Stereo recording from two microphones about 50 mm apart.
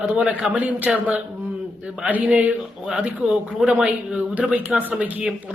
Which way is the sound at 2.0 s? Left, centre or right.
Right.